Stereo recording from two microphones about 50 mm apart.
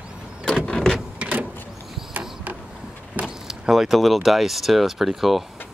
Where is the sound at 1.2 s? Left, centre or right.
Right.